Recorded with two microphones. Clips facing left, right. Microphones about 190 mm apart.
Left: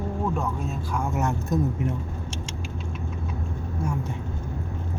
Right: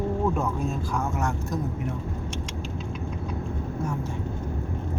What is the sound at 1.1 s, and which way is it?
Speech, 20° left (ahead or behind).